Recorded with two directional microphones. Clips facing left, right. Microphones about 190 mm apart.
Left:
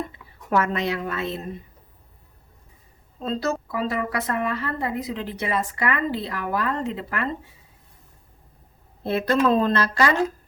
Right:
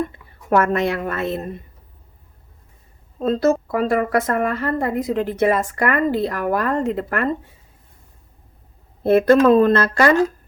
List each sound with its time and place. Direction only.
0.1 s a woman's voice: 50° right (ahead or behind)
3.2 s a woman's voice: 50° right (ahead or behind)
9.0 s a woman's voice: 50° right (ahead or behind)